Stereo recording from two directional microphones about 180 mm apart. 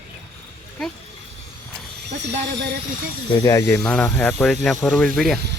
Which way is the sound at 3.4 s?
15° left (ahead or behind).